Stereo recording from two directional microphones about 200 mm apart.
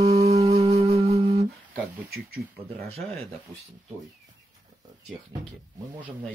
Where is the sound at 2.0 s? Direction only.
55° right (ahead or behind).